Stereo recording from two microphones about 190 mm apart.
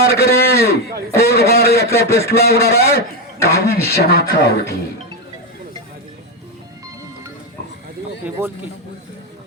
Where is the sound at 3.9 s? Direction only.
55° left (ahead or behind).